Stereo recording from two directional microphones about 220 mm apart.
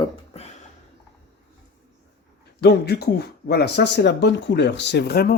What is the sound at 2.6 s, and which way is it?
Speech, 50° left (ahead or behind).